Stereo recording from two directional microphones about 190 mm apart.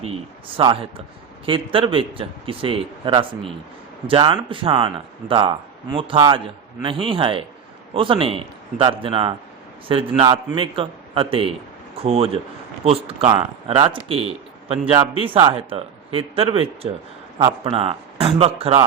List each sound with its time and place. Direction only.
0.1 s a man's voice: 25° right (ahead or behind)